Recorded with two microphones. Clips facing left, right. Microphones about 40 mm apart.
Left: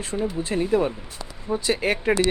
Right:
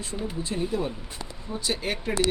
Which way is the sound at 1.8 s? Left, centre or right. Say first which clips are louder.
Left 8 dB; left.